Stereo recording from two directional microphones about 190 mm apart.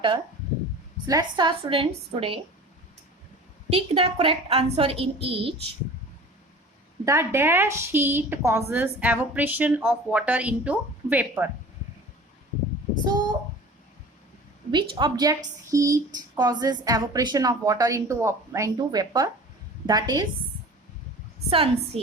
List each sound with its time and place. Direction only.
1.0 s a woman's voice: 20° right (ahead or behind)
3.7 s a woman's voice: 30° right (ahead or behind)
7.0 s a woman's voice: 15° right (ahead or behind)
14.7 s a woman's voice: 25° right (ahead or behind)
21.5 s a woman's voice: 30° right (ahead or behind)